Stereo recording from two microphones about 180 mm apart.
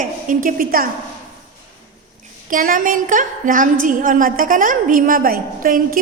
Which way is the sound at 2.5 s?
50° right (ahead or behind).